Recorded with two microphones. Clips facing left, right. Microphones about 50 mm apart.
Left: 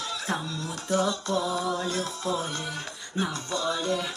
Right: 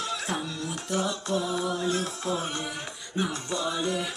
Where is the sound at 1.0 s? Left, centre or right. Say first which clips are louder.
Left 2 dB; right.